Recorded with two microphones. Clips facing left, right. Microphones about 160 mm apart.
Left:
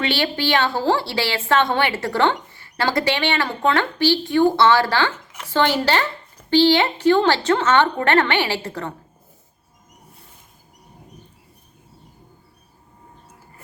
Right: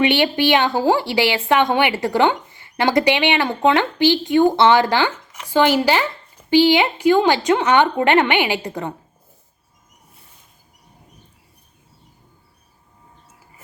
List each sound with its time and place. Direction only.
0.0 s a woman's voice: 15° right (ahead or behind)